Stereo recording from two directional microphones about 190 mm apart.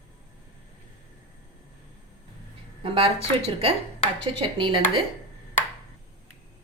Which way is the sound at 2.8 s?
30° right (ahead or behind).